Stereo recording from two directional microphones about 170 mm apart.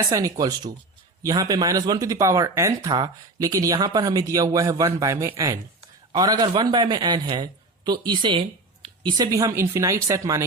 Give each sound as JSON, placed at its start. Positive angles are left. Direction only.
{"t": 0.1, "sound": "a man's voice", "side_deg": -20}